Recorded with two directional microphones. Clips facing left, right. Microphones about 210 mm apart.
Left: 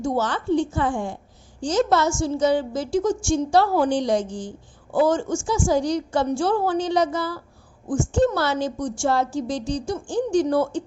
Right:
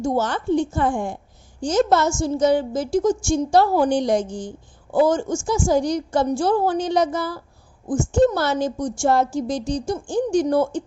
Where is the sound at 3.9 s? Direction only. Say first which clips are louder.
Right 2 dB; 50° right (ahead or behind).